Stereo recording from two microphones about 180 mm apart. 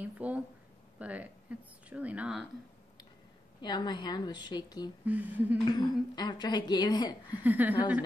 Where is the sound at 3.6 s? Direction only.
25° left (ahead or behind).